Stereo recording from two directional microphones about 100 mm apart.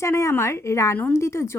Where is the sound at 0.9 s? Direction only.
15° left (ahead or behind).